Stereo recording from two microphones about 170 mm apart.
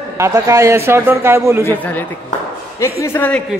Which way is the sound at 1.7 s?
10° left (ahead or behind).